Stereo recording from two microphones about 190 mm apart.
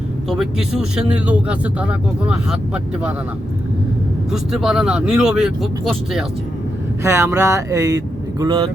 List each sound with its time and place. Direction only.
0.3 s speech: 5° right (ahead or behind)
4.3 s speech: centre (ahead or behind)
7.0 s speech: 15° right (ahead or behind)